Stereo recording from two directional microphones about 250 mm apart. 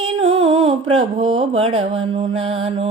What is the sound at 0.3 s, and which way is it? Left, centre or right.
Music, right.